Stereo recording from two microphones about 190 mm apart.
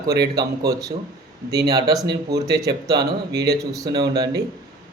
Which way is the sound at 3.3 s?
60° right (ahead or behind).